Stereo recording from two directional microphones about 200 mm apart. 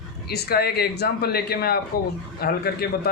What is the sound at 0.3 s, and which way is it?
A man's voice, 50° left (ahead or behind).